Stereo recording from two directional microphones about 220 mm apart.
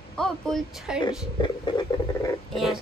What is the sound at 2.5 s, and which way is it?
Speech, centre (ahead or behind).